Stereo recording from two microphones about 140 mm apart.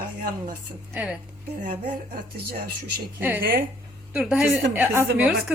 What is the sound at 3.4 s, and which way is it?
Speech, 90° right.